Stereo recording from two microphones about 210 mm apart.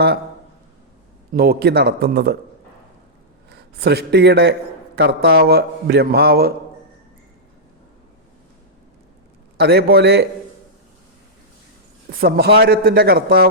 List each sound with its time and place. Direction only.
1.3 s a man's voice: 45° right (ahead or behind)
3.5 s a man's voice: 50° right (ahead or behind)
9.6 s a man's voice: 50° right (ahead or behind)
12.2 s a man's voice: 50° right (ahead or behind)